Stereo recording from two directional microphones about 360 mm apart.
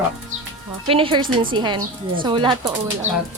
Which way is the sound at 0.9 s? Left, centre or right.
Centre.